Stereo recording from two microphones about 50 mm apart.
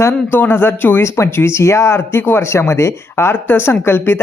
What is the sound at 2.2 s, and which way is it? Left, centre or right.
Speech, left.